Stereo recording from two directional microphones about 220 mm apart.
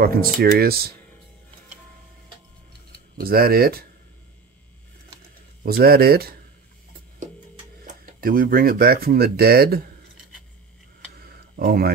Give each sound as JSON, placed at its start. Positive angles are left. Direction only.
{"t": 0.0, "sound": "speech", "side_deg": -40}
{"t": 3.2, "sound": "speech", "side_deg": -45}
{"t": 5.2, "sound": "a sound", "side_deg": -45}
{"t": 7.8, "sound": "speech", "side_deg": -40}
{"t": 11.1, "sound": "tick-tock", "side_deg": -40}